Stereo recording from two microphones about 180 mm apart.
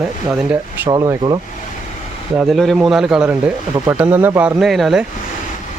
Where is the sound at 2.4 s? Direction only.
Centre (ahead or behind).